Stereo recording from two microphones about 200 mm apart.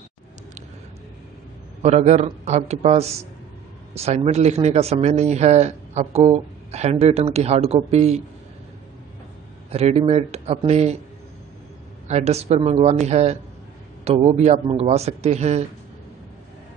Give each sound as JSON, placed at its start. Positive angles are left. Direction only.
{"t": 1.8, "sound": "a man's voice", "side_deg": -35}
{"t": 9.7, "sound": "a man's voice", "side_deg": -30}
{"t": 12.1, "sound": "a man's voice", "side_deg": -35}